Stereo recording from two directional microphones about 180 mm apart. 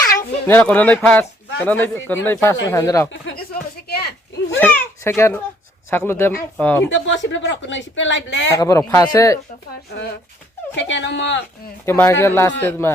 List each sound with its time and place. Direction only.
0.4 s speech: 10° left (ahead or behind)
3.1 s speech: 90° left
3.5 s a sound: 60° left (ahead or behind)
4.5 s a sound: 10° left (ahead or behind)
5.9 s speech: 10° left (ahead or behind)
6.9 s speech: 90° left
8.5 s speech: 20° left (ahead or behind)
10.8 s speech: 85° left
11.9 s speech: 15° left (ahead or behind)